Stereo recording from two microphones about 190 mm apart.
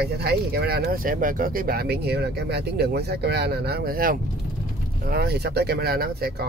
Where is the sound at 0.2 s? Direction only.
55° right (ahead or behind).